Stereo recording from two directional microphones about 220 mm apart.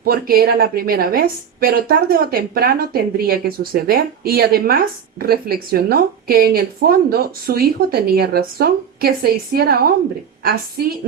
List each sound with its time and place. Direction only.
0.0 s speech: 40° right (ahead or behind)